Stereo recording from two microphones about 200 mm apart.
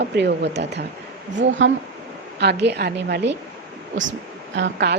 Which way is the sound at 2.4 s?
60° right (ahead or behind).